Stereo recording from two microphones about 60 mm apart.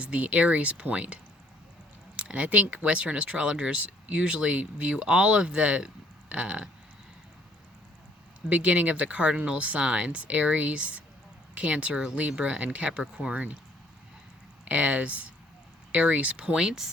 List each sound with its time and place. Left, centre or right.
0.0 s speech: right
8.4 s speech: right
14.6 s speech: right